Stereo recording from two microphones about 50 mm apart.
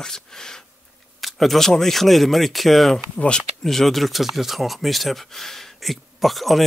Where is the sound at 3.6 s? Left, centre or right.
Centre.